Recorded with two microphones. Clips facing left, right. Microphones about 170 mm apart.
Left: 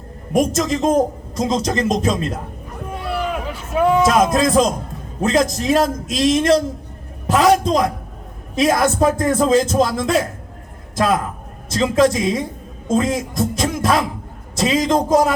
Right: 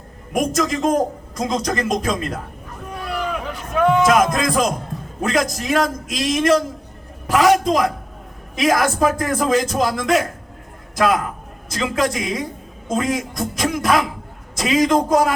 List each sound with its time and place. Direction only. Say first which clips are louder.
0.3 s a man's voice: left 2 dB; 25° left (ahead or behind)
3.8 s a sound: left 1 dB; 10° left (ahead or behind)
4.0 s a man's voice: left 1 dB; 25° left (ahead or behind)